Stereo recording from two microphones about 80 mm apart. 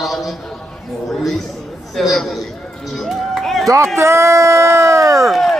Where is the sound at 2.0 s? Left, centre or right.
Centre.